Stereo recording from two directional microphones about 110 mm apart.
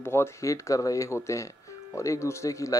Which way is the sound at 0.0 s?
25° left (ahead or behind).